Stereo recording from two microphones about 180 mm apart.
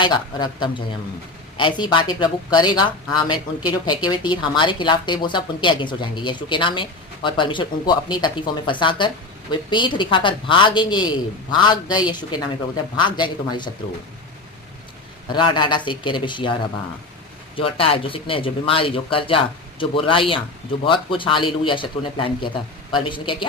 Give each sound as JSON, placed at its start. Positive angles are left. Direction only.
{"t": 0.0, "sound": "speech", "side_deg": 25}
{"t": 15.3, "sound": "speech", "side_deg": 25}
{"t": 17.6, "sound": "speech", "side_deg": 30}